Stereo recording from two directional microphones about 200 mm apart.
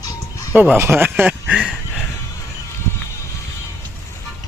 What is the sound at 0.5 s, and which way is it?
Speech, 5° right (ahead or behind).